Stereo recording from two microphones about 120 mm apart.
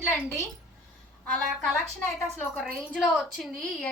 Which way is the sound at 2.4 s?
5° left (ahead or behind).